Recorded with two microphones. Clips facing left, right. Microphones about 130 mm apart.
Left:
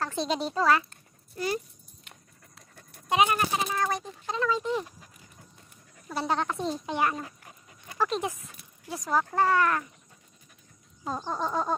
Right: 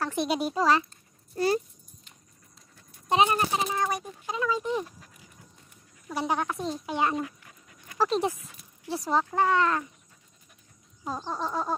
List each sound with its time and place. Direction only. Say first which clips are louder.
0.0 s speech: right 2 dB; 15° right (ahead or behind)
1.3 s speech: right 5 dB; 35° right (ahead or behind)
2.0 s horse: left 4 dB; 65° left (ahead or behind)
3.1 s speech: right 1 dB; 30° right (ahead or behind); by 4.8 s 15° right (ahead or behind)
6.0 s speech: even; 15° right (ahead or behind)
6.5 s a sound: left 1 dB; centre (ahead or behind)
6.9 s speech: right 1 dB; 20° right (ahead or behind)
7.2 s dog: right 6 dB; 35° left (ahead or behind)
8.8 s speech: right 1 dB; 30° right (ahead or behind)
9.2 s speech: left 1 dB; 15° right (ahead or behind)
11.1 s a sound: left 1 dB; centre (ahead or behind)